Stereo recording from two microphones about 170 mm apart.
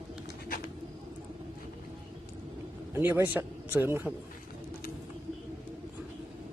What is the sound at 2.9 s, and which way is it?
Speech, 15° right (ahead or behind).